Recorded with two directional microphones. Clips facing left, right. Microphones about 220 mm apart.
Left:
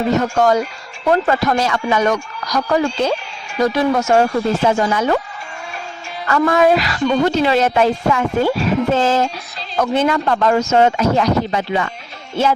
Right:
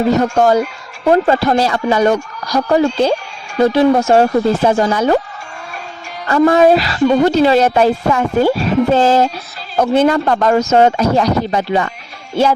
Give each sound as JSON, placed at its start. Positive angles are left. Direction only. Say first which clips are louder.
{"t": 0.2, "sound": "a woman's voice", "louder": "right 3 dB", "side_deg": -30}
{"t": 6.2, "sound": "a woman's voice", "louder": "right 4 dB", "side_deg": -30}